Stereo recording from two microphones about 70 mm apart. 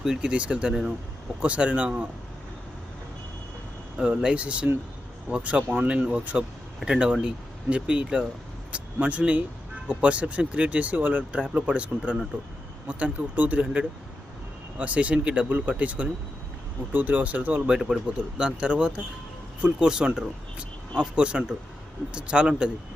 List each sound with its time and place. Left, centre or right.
0.0 s speech: centre
3.9 s speech: centre
17.7 s speech: centre
18.3 s speech: centre